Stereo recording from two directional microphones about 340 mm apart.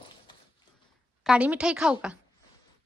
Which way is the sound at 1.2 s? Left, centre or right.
Centre.